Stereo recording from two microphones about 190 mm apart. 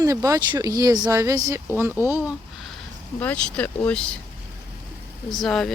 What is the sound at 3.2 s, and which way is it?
Speech, 5° left (ahead or behind).